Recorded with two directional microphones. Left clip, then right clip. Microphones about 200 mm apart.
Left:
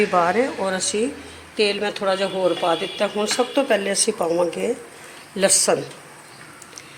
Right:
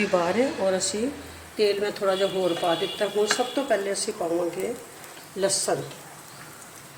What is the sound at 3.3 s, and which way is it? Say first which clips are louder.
Speech: left 5 dB; 15° left (ahead or behind).